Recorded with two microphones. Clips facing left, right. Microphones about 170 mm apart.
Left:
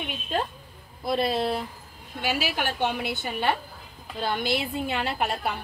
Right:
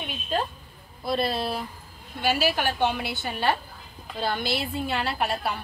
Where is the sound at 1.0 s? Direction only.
20° left (ahead or behind).